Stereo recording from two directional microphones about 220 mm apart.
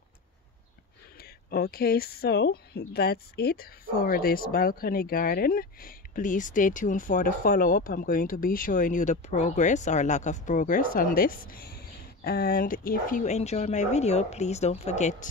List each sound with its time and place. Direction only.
1.2 s speech: 45° left (ahead or behind)